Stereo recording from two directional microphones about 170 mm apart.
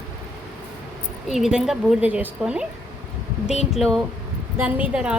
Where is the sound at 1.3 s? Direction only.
Centre (ahead or behind).